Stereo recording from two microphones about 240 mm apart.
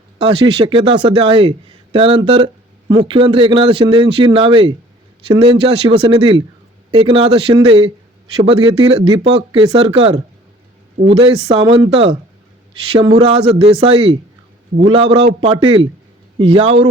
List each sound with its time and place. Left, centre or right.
0.2 s a man's voice: centre